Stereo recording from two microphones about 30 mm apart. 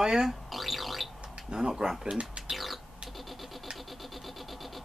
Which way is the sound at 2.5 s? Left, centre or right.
Centre.